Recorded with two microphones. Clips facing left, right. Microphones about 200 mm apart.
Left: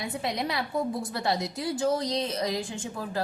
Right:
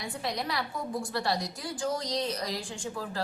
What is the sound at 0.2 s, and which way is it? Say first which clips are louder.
A woman's voice: left 2 dB; 25° left (ahead or behind).